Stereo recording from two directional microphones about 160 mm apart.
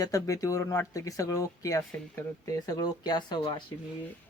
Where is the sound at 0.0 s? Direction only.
20° left (ahead or behind).